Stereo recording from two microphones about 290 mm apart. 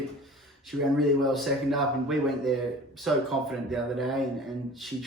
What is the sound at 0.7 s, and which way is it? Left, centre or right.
Speech, centre.